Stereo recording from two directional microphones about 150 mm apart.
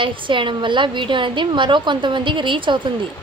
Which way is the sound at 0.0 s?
35° right (ahead or behind).